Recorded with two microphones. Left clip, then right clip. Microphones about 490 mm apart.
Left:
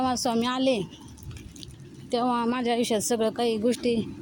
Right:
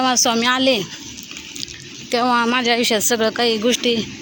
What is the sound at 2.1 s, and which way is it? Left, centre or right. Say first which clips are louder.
Speech: right 9 dB; left.